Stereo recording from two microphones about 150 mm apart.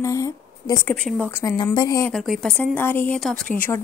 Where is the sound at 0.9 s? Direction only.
5° left (ahead or behind).